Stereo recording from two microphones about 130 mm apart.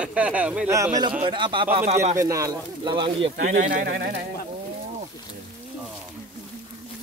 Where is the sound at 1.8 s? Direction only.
65° right (ahead or behind).